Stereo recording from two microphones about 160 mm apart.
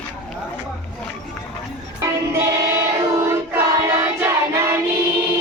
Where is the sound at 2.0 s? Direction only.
15° right (ahead or behind).